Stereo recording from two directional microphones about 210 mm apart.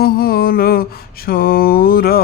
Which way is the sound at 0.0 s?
45° left (ahead or behind).